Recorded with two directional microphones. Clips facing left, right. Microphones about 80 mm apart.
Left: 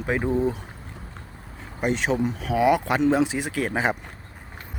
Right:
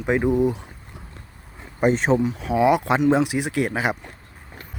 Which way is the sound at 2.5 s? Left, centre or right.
Right.